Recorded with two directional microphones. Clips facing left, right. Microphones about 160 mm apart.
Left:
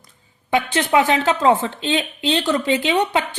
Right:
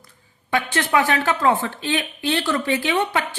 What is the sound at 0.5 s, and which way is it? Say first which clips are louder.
Speech: left 3 dB; 20° left (ahead or behind).